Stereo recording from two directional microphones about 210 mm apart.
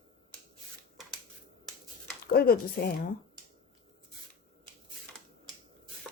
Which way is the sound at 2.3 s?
45° left (ahead or behind).